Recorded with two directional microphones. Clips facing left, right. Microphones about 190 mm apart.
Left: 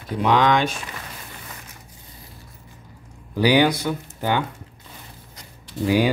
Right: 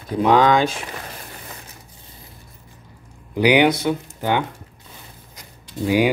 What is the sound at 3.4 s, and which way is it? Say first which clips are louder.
Speech: right 2 dB; 20° right (ahead or behind).